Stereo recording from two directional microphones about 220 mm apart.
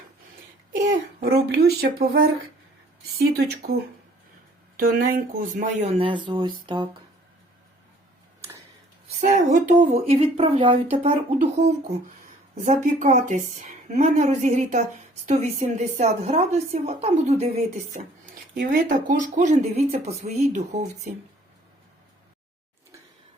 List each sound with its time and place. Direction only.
0.7 s speech: 40° right (ahead or behind)
4.8 s a woman's voice: 40° right (ahead or behind); by 6.8 s 20° right (ahead or behind)
9.0 s a woman's voice: 35° right (ahead or behind)
18.5 s a woman's voice: 40° right (ahead or behind)